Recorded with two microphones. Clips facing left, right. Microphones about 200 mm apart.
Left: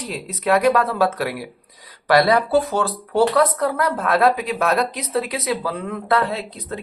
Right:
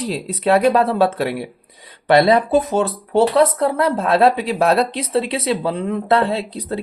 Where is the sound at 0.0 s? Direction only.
30° right (ahead or behind).